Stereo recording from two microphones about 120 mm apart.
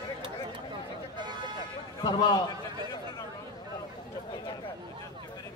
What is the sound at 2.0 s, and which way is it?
Speech, 35° left (ahead or behind).